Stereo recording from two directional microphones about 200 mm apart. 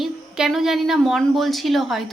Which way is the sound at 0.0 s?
Centre (ahead or behind).